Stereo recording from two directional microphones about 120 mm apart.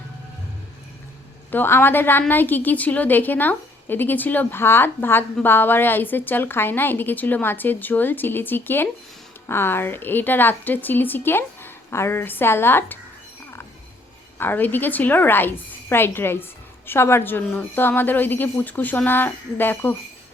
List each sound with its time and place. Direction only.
1.5 s a woman's voice: 20° left (ahead or behind)
14.3 s a woman's voice: 15° left (ahead or behind)